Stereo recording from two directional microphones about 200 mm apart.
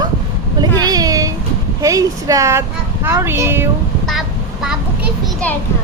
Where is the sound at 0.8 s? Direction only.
20° right (ahead or behind).